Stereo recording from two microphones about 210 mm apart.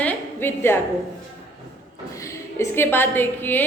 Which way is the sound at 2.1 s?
15° left (ahead or behind).